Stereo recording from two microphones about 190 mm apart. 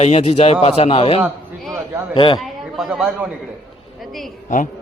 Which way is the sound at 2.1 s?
25° left (ahead or behind).